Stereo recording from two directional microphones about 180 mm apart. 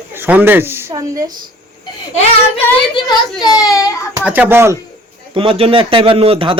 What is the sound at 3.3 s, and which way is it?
Speech, 20° left (ahead or behind).